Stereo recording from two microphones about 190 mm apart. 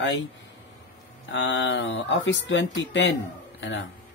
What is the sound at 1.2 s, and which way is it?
Speech, 75° left (ahead or behind).